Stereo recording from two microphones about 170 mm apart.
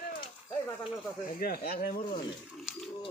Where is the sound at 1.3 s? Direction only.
60° left (ahead or behind).